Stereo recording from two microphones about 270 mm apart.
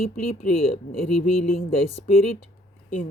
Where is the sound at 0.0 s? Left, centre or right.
Left.